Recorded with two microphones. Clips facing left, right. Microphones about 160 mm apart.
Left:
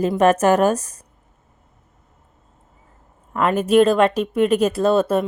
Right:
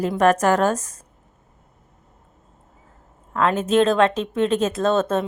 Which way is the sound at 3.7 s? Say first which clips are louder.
Left 3 dB; 10° left (ahead or behind).